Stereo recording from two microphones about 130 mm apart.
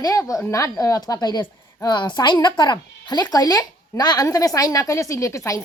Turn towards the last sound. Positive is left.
turn(degrees=25)  # may be behind; listen again after turning